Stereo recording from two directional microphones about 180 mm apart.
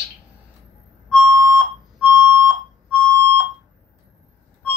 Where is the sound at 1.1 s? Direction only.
15° right (ahead or behind).